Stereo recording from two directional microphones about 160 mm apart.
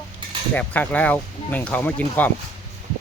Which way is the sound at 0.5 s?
10° left (ahead or behind).